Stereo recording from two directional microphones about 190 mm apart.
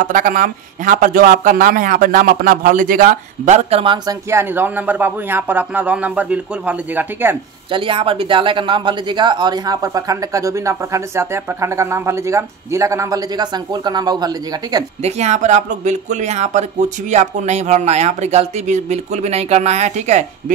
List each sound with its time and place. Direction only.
0.0 s a man's voice: 45° right (ahead or behind)
4.3 s a man's voice: 10° right (ahead or behind)
7.7 s speech: 25° right (ahead or behind)
15.0 s speech: 35° right (ahead or behind)